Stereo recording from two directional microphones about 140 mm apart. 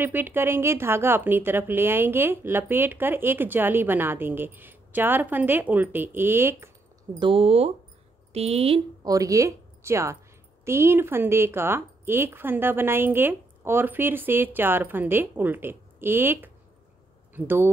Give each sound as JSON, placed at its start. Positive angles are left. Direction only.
{"t": 0.0, "sound": "a woman's voice", "side_deg": -15}
{"t": 7.2, "sound": "speech", "side_deg": -40}
{"t": 9.0, "sound": "a woman's voice", "side_deg": -25}